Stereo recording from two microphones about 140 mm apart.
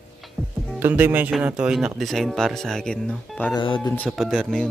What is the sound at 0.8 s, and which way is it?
Speech, 15° right (ahead or behind).